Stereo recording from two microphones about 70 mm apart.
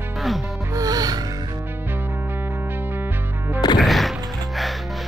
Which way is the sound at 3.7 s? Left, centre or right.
Centre.